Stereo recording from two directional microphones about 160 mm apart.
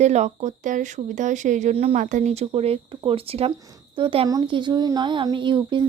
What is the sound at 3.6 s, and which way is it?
A woman's voice, 25° right (ahead or behind).